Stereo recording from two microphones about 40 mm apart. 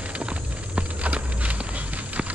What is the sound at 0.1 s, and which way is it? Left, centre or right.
Walk, right.